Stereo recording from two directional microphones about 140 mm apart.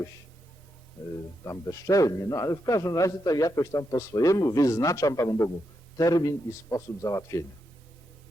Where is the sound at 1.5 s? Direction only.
25° left (ahead or behind).